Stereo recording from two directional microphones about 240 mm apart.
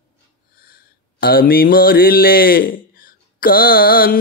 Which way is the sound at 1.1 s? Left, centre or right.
Left.